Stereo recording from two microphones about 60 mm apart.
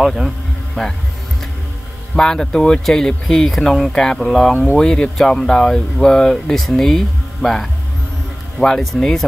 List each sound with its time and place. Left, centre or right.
0.0 s speech: centre
2.1 s speech: centre
4.5 s speech: left
4.7 s speech: centre